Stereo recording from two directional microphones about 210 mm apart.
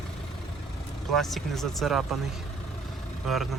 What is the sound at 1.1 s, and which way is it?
Speech, centre (ahead or behind).